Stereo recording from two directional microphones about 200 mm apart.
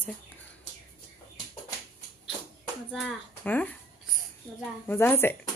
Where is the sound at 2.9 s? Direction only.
5° left (ahead or behind).